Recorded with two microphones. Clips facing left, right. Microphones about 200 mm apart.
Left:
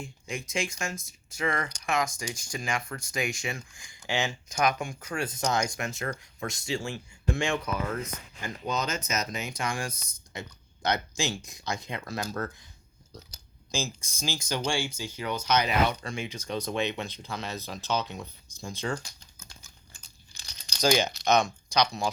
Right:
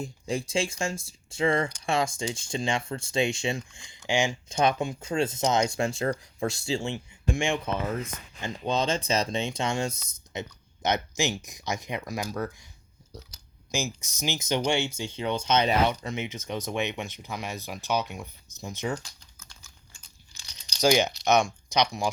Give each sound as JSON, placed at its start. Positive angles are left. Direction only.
{"t": 0.0, "sound": "speech", "side_deg": -35}
{"t": 4.4, "sound": "speech", "side_deg": -25}
{"t": 20.8, "sound": "speech", "side_deg": -15}